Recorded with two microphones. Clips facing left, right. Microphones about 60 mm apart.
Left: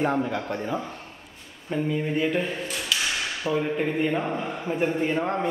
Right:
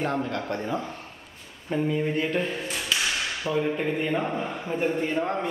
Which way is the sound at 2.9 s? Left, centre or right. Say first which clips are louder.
Even; right.